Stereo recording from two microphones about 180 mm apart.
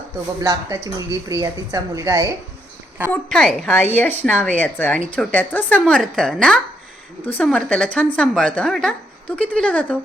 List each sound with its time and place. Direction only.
0.4 s a woman's voice: 20° right (ahead or behind)
3.1 s speech: centre (ahead or behind)